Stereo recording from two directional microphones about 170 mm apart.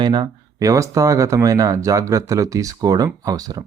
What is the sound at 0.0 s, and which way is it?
Speech, 25° right (ahead or behind).